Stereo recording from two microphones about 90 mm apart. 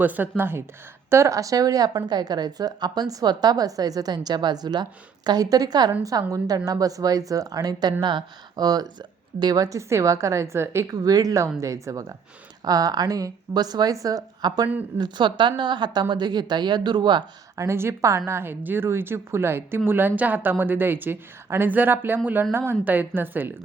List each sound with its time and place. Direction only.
0.0 s a woman's voice: 20° right (ahead or behind)
1.1 s a woman's voice: 35° right (ahead or behind)
10.9 s a woman's voice: 45° right (ahead or behind)
17.6 s a woman's voice: 30° right (ahead or behind)